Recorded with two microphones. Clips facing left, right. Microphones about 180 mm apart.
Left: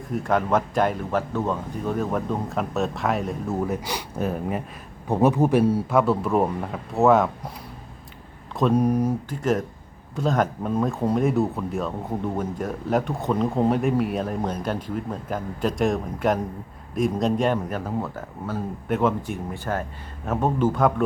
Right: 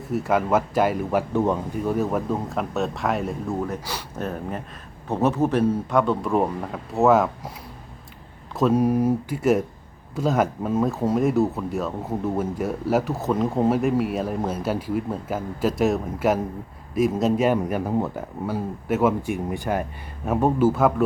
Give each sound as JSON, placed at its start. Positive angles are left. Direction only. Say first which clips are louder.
{"t": 0.1, "sound": "speech", "louder": "right 1 dB", "side_deg": -5}
{"t": 1.3, "sound": "speech", "louder": "right 4 dB", "side_deg": -15}
{"t": 1.9, "sound": "speech", "louder": "right 1 dB", "side_deg": -5}
{"t": 8.5, "sound": "speech", "louder": "right 1 dB", "side_deg": 0}